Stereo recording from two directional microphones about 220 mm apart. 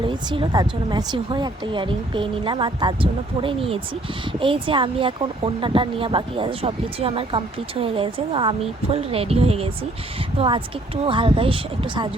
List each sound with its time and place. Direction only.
0.0 s speech: 20° right (ahead or behind)